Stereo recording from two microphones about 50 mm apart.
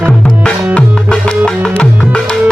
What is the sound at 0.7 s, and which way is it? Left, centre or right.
Music, left.